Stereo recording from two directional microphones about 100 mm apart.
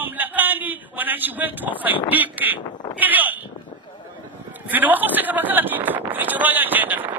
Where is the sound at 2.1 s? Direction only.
15° right (ahead or behind).